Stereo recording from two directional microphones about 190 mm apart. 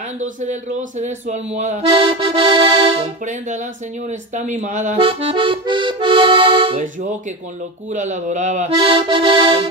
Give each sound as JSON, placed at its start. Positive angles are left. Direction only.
{"t": 0.2, "sound": "speech", "side_deg": -40}
{"t": 4.4, "sound": "accordion", "side_deg": -40}
{"t": 6.8, "sound": "speech", "side_deg": -45}